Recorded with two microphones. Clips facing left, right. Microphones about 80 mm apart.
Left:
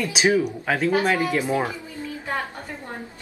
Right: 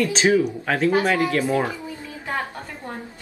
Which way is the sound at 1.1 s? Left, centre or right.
Centre.